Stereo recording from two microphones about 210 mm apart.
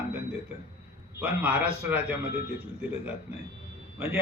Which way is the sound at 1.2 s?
5° right (ahead or behind).